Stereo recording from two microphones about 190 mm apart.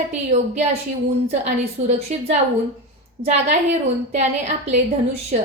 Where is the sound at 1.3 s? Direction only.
35° right (ahead or behind).